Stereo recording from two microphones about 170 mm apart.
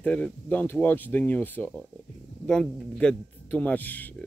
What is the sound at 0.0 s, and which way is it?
A man's voice, 5° left (ahead or behind).